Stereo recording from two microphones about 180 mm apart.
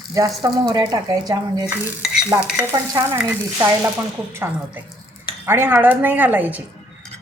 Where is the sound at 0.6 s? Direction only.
25° right (ahead or behind).